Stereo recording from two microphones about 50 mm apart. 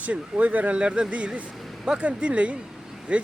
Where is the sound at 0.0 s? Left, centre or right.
Right.